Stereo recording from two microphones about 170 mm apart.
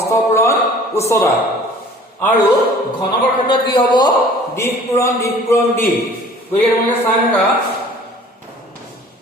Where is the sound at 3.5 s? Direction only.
25° left (ahead or behind).